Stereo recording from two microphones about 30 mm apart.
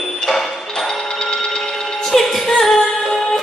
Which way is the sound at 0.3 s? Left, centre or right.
Centre.